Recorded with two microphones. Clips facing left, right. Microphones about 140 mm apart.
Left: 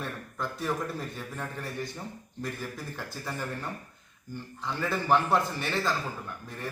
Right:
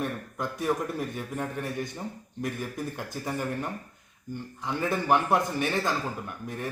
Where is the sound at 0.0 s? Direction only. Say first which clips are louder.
Right 4 dB; 15° right (ahead or behind).